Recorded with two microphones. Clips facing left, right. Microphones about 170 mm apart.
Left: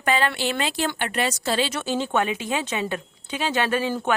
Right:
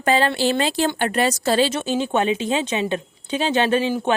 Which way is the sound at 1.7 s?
20° right (ahead or behind).